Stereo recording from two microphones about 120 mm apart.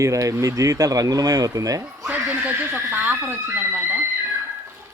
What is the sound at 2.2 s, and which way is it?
Speech, 15° right (ahead or behind).